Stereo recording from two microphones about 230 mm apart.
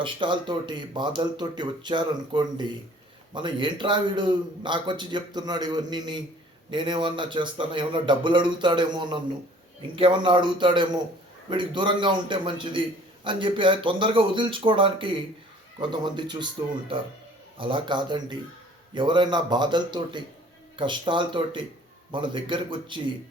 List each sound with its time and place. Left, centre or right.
0.0 s a man's voice: right
17.6 s a man's voice: right